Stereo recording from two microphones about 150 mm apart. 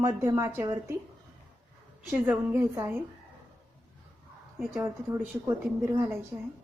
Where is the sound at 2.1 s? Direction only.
10° right (ahead or behind).